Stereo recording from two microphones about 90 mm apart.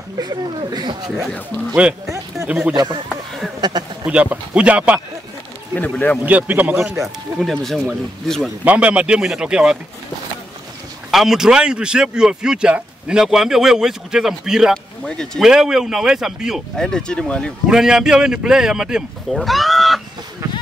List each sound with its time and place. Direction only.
0.2 s speech: 50° right (ahead or behind)
1.0 s speech: centre (ahead or behind)
2.7 s speech: 50° right (ahead or behind)
4.0 s a man's voice: 15° right (ahead or behind)
5.8 s speech: 20° left (ahead or behind)
6.2 s a man's voice: 20° right (ahead or behind)
7.0 s speech: centre (ahead or behind)
8.6 s a man's voice: 15° right (ahead or behind)
11.1 s a man's voice: 5° right (ahead or behind)
14.7 s speech: 5° left (ahead or behind)
15.4 s speech: 5° right (ahead or behind)
16.7 s speech: 5° left (ahead or behind)
17.6 s a man's voice: 5° right (ahead or behind)